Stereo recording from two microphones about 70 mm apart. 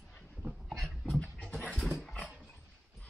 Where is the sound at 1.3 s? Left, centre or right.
Left.